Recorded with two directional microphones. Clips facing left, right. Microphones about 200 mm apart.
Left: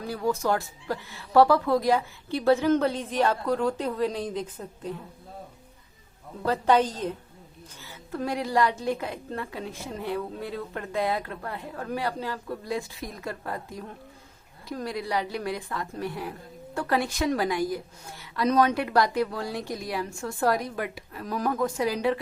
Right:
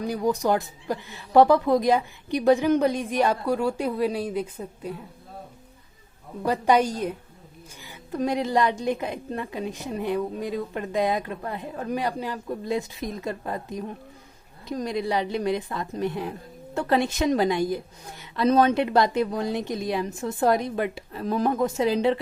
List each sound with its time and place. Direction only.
0.0 s a woman's voice: 15° right (ahead or behind)
6.4 s a woman's voice: 15° right (ahead or behind)